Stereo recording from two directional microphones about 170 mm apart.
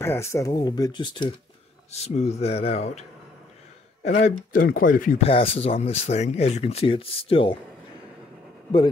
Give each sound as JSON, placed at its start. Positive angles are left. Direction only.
{"t": 0.0, "sound": "speech", "side_deg": 15}
{"t": 1.9, "sound": "speech", "side_deg": 40}
{"t": 4.5, "sound": "speech", "side_deg": 55}
{"t": 5.2, "sound": "speech", "side_deg": 35}